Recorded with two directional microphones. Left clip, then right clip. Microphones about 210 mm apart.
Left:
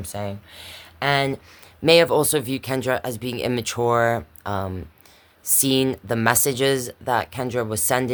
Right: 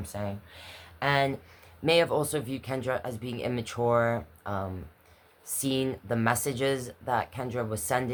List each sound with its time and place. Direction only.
0.0 s speech: 50° left (ahead or behind)